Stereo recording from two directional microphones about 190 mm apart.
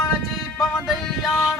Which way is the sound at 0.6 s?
Centre (ahead or behind).